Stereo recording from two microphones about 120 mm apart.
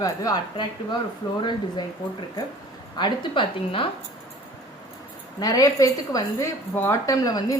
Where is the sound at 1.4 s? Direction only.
40° left (ahead or behind).